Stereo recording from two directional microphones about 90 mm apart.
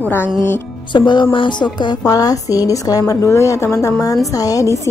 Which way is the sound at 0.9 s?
60° left (ahead or behind).